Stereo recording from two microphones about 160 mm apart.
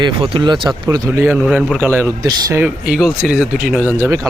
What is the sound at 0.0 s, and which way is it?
Speech, 30° right (ahead or behind).